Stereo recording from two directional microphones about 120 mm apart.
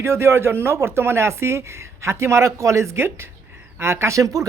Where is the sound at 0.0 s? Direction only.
20° right (ahead or behind).